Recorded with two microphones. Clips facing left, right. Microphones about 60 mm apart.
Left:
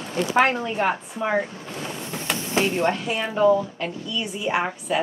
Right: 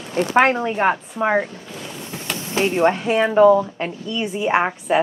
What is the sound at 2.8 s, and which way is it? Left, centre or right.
A woman's voice, right.